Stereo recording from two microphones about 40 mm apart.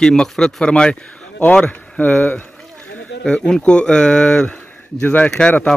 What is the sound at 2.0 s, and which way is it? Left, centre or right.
Speech, left.